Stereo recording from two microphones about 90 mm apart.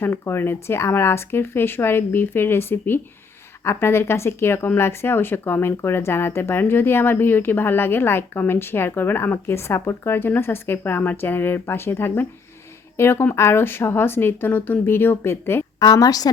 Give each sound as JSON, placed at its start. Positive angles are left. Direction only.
{"t": 0.0, "sound": "speech", "side_deg": 25}
{"t": 15.8, "sound": "a woman's voice", "side_deg": 45}